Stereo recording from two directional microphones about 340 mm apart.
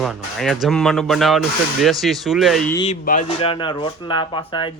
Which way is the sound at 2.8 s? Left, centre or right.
Centre.